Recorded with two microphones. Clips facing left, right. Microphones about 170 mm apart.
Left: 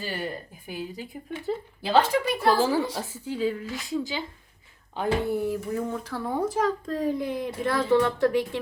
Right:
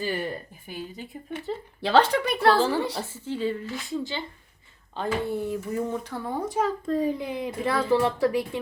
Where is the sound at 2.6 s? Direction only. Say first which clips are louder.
Even; 5° left (ahead or behind).